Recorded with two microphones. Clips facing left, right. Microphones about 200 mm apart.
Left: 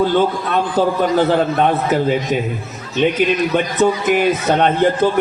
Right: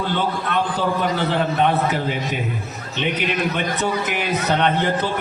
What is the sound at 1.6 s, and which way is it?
Speech, 50° left (ahead or behind).